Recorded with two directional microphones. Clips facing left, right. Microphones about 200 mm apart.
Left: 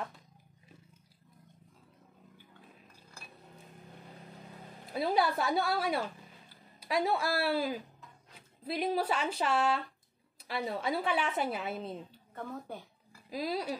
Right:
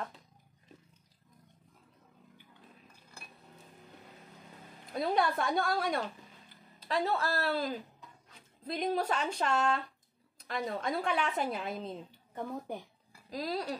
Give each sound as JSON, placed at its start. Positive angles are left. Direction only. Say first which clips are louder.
{"t": 4.9, "sound": "speech", "louder": "left 1 dB", "side_deg": 5}
{"t": 12.4, "sound": "speech", "louder": "right 3 dB", "side_deg": -15}
{"t": 13.3, "sound": "speech", "louder": "left 1 dB", "side_deg": 5}